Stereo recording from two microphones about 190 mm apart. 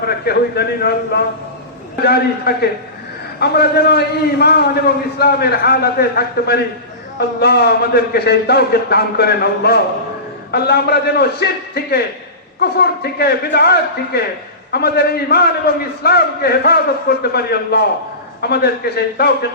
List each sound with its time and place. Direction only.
0.0 s a man's voice: 55° left (ahead or behind)